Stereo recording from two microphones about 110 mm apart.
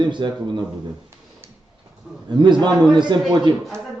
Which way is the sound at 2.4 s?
45° right (ahead or behind).